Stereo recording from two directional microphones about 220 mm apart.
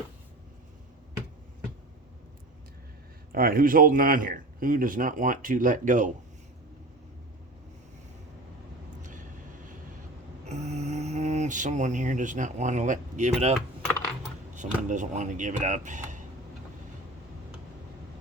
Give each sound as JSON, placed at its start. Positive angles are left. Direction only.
{"t": 3.3, "sound": "speech", "side_deg": -40}
{"t": 9.0, "sound": "vehicle", "side_deg": -35}
{"t": 10.4, "sound": "speech", "side_deg": -30}
{"t": 14.8, "sound": "speech", "side_deg": -35}